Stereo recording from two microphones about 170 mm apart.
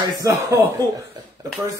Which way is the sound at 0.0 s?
20° right (ahead or behind).